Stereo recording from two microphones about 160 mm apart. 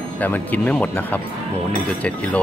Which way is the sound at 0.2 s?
10° left (ahead or behind).